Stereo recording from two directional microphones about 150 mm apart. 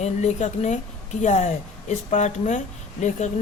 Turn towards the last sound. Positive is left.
turn(degrees=50)  # may be behind; listen again after turning